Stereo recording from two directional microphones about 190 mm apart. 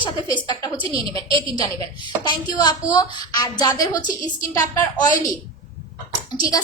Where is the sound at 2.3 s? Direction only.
25° left (ahead or behind).